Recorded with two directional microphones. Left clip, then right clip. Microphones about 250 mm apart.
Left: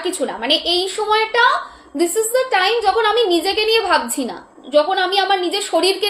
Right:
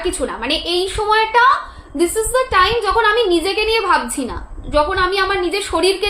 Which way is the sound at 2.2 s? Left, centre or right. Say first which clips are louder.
Right 2 dB; centre.